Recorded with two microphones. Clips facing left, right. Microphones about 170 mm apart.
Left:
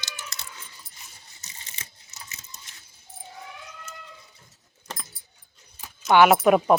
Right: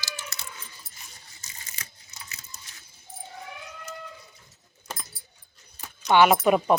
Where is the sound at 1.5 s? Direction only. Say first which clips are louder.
Even; 25° left (ahead or behind).